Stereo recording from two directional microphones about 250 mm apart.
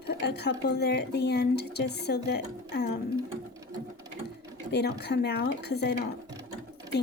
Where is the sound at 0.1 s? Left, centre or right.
Left.